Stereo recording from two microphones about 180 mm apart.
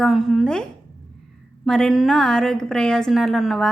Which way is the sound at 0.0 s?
Centre (ahead or behind).